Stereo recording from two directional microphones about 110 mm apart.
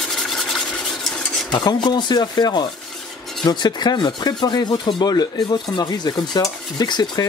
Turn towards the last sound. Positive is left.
turn(degrees=40)  # may be behind; listen again after turning